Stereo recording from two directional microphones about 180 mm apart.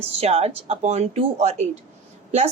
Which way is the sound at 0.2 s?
35° right (ahead or behind).